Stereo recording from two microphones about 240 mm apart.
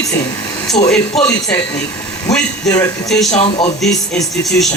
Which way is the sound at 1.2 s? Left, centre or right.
Centre.